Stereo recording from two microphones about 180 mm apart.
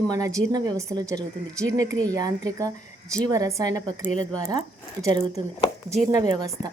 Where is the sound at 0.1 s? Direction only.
20° right (ahead or behind).